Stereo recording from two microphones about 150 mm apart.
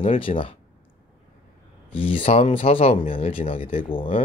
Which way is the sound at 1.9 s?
35° left (ahead or behind).